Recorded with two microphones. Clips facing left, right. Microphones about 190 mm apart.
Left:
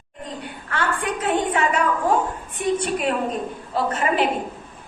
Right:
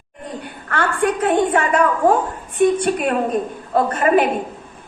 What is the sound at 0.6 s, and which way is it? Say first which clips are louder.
A woman's voice: right 6 dB; 55° right (ahead or behind).